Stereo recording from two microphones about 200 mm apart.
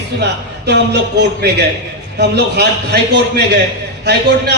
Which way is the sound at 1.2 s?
55° right (ahead or behind).